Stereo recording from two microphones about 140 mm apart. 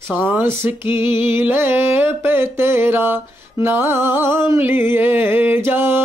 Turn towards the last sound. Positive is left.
turn(degrees=-15)  # may be behind; listen again after turning